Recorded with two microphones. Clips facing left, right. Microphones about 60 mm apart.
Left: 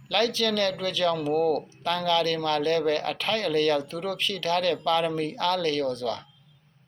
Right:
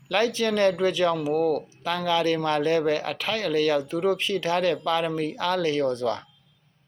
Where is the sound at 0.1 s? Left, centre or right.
Centre.